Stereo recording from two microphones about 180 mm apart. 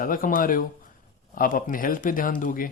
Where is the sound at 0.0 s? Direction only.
50° left (ahead or behind).